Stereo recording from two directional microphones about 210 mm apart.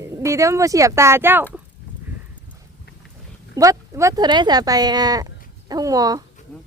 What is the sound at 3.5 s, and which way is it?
Speech, 15° right (ahead or behind).